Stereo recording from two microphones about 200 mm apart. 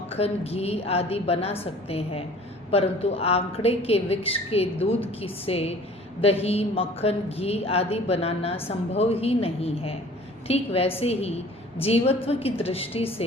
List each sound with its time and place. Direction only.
0.1 s a woman's voice: 30° left (ahead or behind)